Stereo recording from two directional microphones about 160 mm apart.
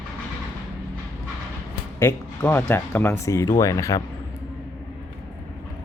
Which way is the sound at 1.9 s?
15° left (ahead or behind).